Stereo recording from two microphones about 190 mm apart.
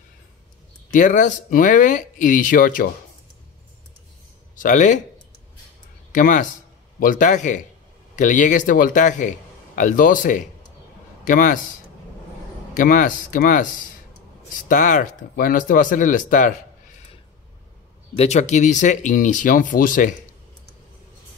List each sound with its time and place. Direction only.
0.9 s speech: 40° left (ahead or behind)
4.6 s speech: 40° left (ahead or behind)
6.1 s speech: 40° left (ahead or behind)
12.7 s speech: 45° left (ahead or behind)
18.1 s speech: 35° left (ahead or behind)